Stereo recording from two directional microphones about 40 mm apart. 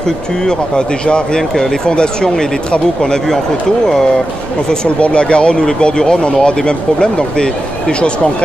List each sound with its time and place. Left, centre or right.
0.0 s speech: centre
5.0 s speech: left